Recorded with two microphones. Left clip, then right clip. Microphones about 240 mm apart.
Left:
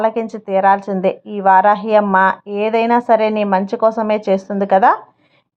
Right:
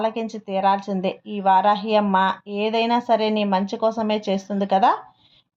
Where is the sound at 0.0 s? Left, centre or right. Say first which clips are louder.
Left 7 dB; centre.